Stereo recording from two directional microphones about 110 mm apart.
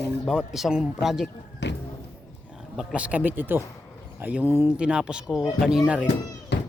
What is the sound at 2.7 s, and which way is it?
Speech, 5° right (ahead or behind).